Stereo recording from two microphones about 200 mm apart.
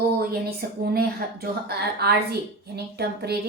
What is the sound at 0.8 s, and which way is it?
A woman's voice, 50° right (ahead or behind).